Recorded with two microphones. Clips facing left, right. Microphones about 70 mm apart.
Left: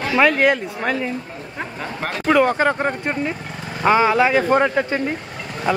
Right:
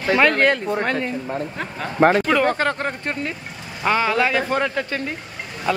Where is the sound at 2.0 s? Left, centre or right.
Right.